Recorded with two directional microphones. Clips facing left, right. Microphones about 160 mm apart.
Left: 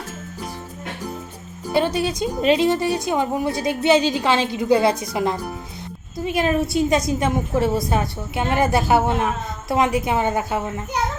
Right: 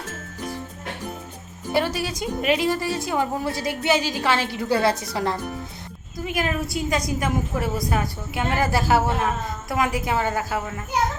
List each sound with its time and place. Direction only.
1.7 s a woman's voice: 20° left (ahead or behind)